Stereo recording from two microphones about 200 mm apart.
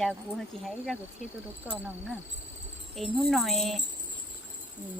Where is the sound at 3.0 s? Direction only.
Centre (ahead or behind).